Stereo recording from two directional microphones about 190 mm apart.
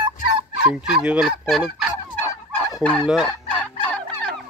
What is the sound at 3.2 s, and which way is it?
Fowl, 5° left (ahead or behind).